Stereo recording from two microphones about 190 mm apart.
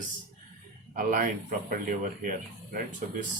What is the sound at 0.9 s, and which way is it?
Speech, 45° right (ahead or behind).